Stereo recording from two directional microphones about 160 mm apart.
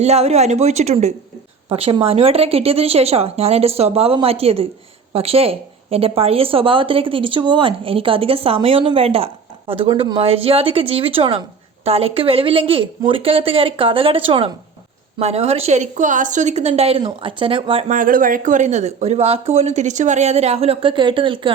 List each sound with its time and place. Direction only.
0.0 s a woman's voice: 40° right (ahead or behind)
17.8 s speech: 55° right (ahead or behind); by 21.5 s 30° right (ahead or behind)